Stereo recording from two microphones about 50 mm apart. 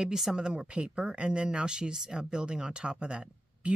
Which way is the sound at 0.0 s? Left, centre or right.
Centre.